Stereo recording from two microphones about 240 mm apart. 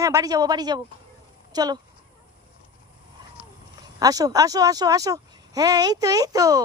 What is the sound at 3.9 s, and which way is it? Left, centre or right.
Speech, centre.